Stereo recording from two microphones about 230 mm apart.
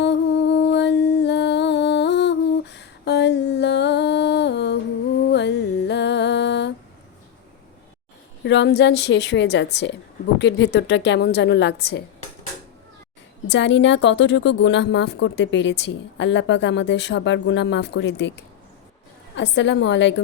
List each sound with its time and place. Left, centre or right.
0.0 s music: left
5.3 s mantra: left
8.4 s a woman's voice: left
13.5 s a woman's voice: left
19.4 s a woman's voice: left